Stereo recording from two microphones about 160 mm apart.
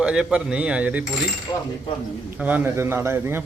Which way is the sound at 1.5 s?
25° left (ahead or behind).